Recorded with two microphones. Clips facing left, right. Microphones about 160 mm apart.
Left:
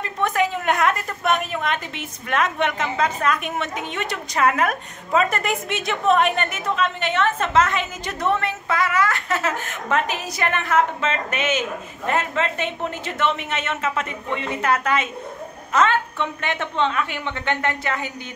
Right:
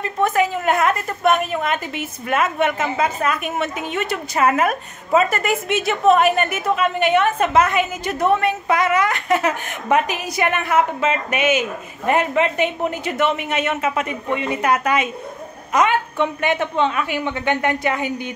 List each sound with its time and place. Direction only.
0.0 s a woman's voice: 5° right (ahead or behind)